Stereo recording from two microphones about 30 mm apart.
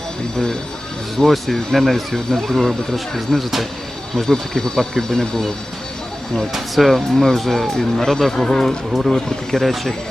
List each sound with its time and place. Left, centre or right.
1.1 s speech: centre
4.3 s speech: centre
6.5 s speech: centre